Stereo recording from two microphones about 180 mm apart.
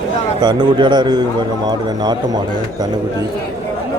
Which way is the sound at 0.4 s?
25° right (ahead or behind).